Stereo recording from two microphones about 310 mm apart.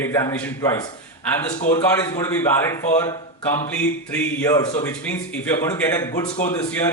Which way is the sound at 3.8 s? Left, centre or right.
Centre.